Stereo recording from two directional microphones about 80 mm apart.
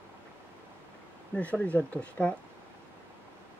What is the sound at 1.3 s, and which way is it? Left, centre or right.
Speech, centre.